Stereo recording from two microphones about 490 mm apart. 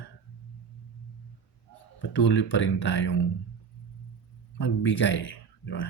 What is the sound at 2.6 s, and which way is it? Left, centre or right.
Speech, left.